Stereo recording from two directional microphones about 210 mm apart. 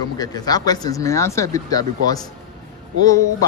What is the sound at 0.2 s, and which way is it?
A man's voice, 20° left (ahead or behind).